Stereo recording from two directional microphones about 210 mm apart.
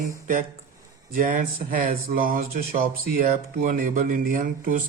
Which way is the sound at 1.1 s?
40° right (ahead or behind).